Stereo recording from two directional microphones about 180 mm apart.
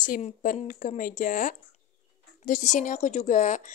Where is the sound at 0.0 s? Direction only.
45° left (ahead or behind).